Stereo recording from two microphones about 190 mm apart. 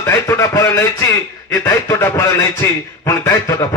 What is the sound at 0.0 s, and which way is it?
A man's voice, 15° left (ahead or behind).